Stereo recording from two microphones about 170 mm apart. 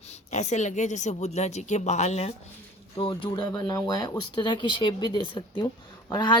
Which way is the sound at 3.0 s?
30° left (ahead or behind).